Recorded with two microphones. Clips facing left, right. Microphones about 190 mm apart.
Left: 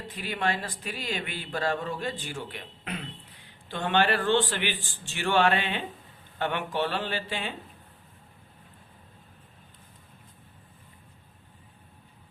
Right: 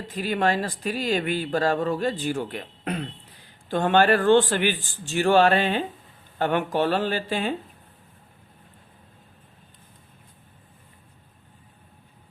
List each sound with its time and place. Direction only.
0.2 s a man's voice: 40° right (ahead or behind)